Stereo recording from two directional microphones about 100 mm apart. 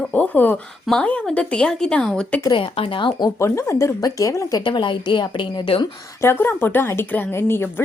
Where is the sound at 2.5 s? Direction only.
65° left (ahead or behind).